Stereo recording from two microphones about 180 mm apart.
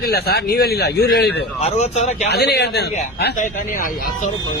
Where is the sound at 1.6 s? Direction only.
40° left (ahead or behind).